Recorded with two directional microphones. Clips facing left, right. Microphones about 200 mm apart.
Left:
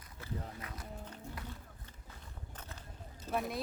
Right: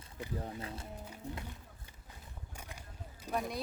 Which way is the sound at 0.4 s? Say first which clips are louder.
Right 4 dB; 30° right (ahead or behind).